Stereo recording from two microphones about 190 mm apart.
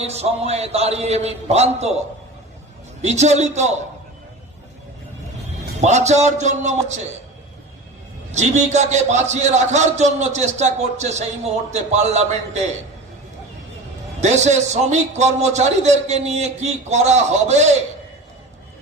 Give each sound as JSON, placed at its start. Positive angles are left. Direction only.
{"t": 0.0, "sound": "a man's voice", "side_deg": -35}
{"t": 3.0, "sound": "a man's voice", "side_deg": -35}
{"t": 5.8, "sound": "a man's voice", "side_deg": -35}
{"t": 8.3, "sound": "a man's voice", "side_deg": -35}
{"t": 14.2, "sound": "a man's voice", "side_deg": -35}